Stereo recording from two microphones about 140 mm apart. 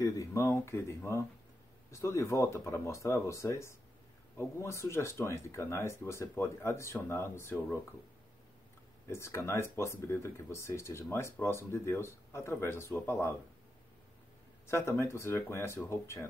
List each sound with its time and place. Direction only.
0.0 s speech: 20° left (ahead or behind)
9.1 s speech: 20° left (ahead or behind)
14.7 s speech: 20° left (ahead or behind)